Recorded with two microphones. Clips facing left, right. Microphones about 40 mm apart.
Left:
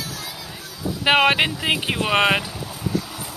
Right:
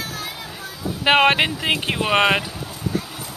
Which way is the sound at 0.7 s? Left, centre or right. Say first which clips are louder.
Left 1 dB; centre.